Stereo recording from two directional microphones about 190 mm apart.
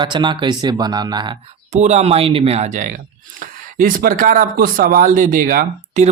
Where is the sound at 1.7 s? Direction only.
35° right (ahead or behind).